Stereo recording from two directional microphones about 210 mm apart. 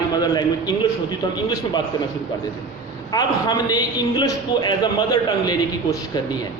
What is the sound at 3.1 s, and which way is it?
A man's voice, 20° left (ahead or behind).